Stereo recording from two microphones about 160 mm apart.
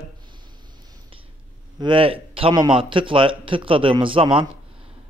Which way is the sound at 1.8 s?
35° right (ahead or behind).